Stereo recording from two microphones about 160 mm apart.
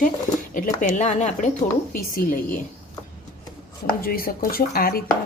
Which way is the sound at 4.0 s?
65° left (ahead or behind).